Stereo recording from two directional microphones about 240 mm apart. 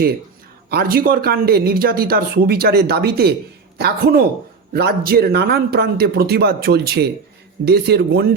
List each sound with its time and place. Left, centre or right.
0.7 s speech: right